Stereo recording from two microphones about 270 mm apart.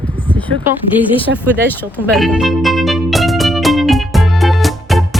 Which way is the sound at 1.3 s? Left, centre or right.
Right.